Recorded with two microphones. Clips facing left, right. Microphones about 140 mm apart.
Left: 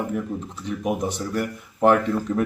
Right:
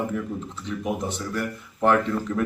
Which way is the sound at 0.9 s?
15° left (ahead or behind).